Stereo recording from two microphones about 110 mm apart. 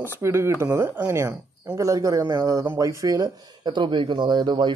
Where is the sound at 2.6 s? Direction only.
25° right (ahead or behind).